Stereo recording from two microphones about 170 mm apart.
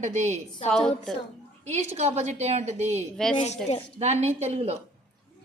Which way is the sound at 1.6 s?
40° right (ahead or behind).